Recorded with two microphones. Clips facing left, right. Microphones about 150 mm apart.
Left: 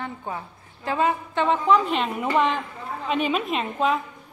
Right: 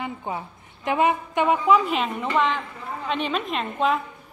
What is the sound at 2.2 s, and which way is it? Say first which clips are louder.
A woman's voice: left 2 dB; 15° left (ahead or behind).